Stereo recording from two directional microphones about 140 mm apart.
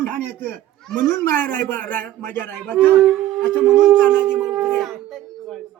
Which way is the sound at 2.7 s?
Centre (ahead or behind).